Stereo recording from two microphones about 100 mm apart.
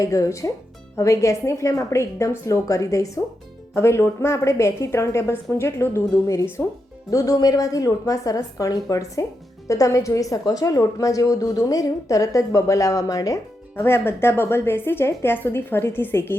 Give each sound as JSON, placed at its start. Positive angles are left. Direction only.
{"t": 0.0, "sound": "a woman's voice", "side_deg": 35}